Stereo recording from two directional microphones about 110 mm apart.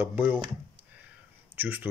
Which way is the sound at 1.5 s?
15° right (ahead or behind).